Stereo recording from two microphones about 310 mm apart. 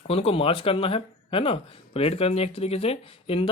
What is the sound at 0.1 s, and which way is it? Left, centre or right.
Speech, centre.